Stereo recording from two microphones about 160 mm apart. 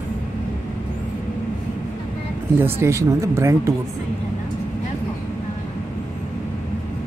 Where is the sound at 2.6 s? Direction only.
15° right (ahead or behind).